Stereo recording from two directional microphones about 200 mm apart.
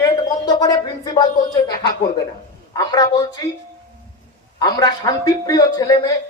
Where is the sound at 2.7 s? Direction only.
20° left (ahead or behind).